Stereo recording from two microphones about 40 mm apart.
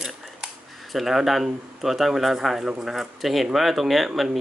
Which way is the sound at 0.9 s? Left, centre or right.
Centre.